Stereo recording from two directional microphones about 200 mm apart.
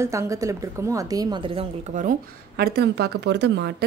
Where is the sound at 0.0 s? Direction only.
15° right (ahead or behind).